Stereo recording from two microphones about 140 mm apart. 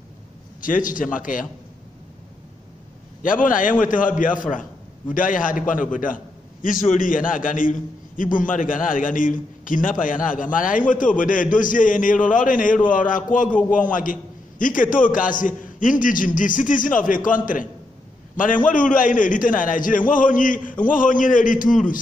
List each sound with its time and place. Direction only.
0.6 s a man's voice: 75° left (ahead or behind)
3.2 s a man's voice: 70° left (ahead or behind)